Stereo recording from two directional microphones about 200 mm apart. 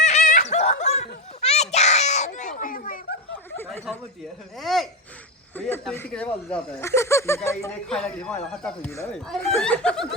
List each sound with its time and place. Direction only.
0.0 s giggle: 35° left (ahead or behind)
4.5 s speech: centre (ahead or behind)
7.9 s speech: 5° left (ahead or behind)